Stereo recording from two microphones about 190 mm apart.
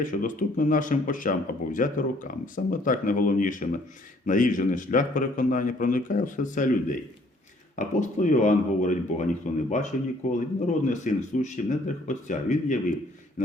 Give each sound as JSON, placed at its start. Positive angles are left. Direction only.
{"t": 0.0, "sound": "speech", "side_deg": 45}